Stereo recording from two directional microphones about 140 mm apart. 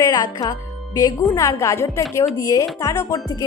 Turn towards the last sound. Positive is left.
turn(degrees=25)  # may be behind; listen again after turning